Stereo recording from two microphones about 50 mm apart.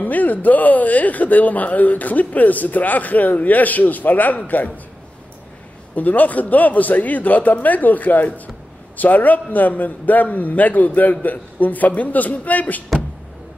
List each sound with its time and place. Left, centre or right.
0.0 s speech: left
5.9 s speech: left